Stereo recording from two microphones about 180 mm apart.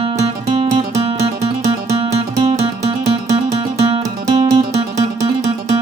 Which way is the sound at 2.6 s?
15° right (ahead or behind).